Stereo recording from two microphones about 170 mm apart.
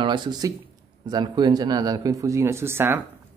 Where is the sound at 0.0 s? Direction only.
25° right (ahead or behind).